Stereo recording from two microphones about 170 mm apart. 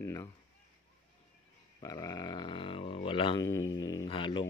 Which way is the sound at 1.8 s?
20° left (ahead or behind).